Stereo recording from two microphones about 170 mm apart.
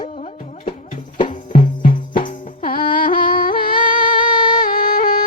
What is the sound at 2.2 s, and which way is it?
Music, 55° left (ahead or behind).